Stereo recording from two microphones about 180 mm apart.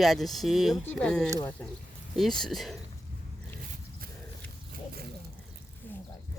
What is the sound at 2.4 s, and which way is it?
Speech, centre (ahead or behind).